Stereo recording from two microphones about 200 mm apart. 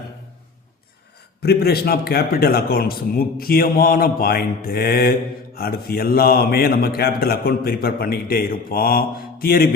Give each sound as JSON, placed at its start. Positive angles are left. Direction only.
{"t": 1.4, "sound": "a man's voice", "side_deg": 50}